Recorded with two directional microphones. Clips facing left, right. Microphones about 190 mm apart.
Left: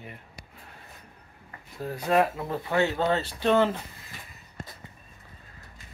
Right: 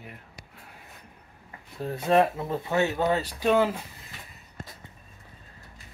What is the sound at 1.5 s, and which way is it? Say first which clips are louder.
Speech: right 1 dB; 25° right (ahead or behind).